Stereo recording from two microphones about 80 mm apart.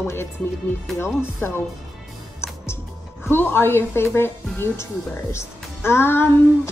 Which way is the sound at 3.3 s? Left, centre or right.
Left.